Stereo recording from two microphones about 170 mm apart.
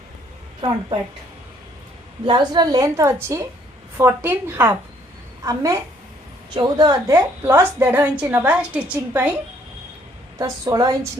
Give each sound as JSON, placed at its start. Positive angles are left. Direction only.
{"t": 2.2, "sound": "a woman's voice", "side_deg": -25}
{"t": 10.3, "sound": "a woman's voice", "side_deg": -20}